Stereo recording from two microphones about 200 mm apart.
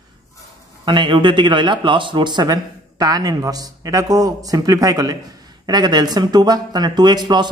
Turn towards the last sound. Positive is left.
turn(degrees=-20)  # may be behind; listen again after turning